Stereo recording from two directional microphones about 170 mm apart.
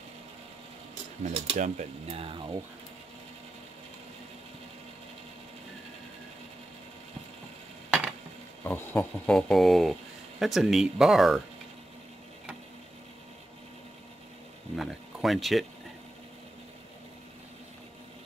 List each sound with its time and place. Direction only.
1.2 s speech: 40° right (ahead or behind)
8.6 s speech: 10° left (ahead or behind)
14.8 s speech: centre (ahead or behind)